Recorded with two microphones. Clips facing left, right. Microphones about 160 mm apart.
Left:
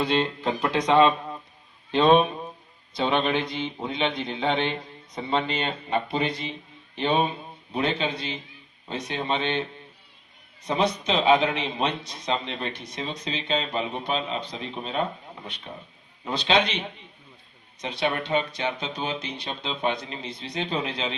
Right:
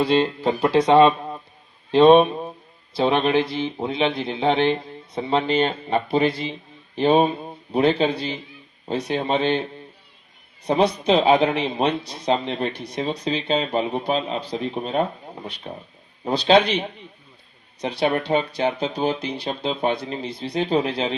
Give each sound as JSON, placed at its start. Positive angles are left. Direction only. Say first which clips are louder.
{"t": 0.0, "sound": "a man's voice", "louder": "right 5 dB", "side_deg": -30}
{"t": 17.7, "sound": "a man's voice", "louder": "right 5 dB", "side_deg": -35}